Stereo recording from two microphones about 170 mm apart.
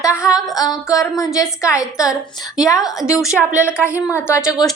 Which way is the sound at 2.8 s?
Centre (ahead or behind).